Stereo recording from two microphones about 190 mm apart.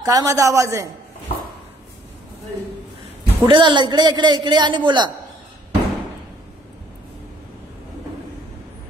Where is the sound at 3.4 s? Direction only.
25° right (ahead or behind).